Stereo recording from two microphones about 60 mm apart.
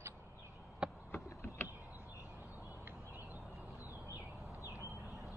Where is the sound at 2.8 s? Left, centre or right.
Right.